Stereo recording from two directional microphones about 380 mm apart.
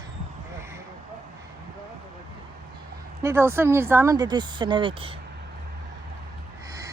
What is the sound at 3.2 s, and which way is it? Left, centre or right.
Speech, centre.